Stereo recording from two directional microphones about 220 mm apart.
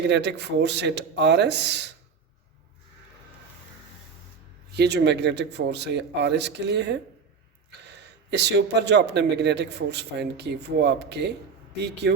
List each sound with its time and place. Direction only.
0.1 s a man's voice: 50° right (ahead or behind)
4.8 s a man's voice: 50° right (ahead or behind)